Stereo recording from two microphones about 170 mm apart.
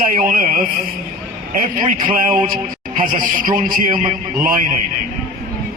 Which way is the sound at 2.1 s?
55° right (ahead or behind).